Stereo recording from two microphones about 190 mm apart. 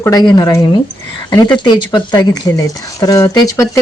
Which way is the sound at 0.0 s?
20° left (ahead or behind).